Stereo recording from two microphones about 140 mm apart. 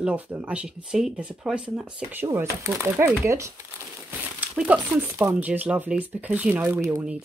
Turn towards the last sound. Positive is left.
turn(degrees=-15)  # may be behind; listen again after turning